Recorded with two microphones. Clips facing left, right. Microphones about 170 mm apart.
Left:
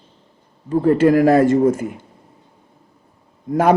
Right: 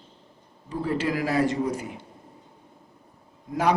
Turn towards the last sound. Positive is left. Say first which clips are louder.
# left 8 dB
turn(degrees=50)  # may be behind; listen again after turning